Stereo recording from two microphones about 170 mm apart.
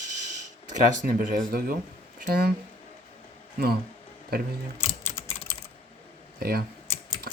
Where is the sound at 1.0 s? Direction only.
60° right (ahead or behind).